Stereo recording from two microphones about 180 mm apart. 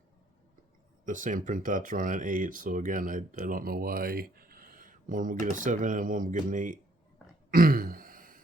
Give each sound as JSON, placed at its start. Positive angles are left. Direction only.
{"t": 1.0, "sound": "speech", "side_deg": -45}
{"t": 7.5, "sound": "throat clearing", "side_deg": -55}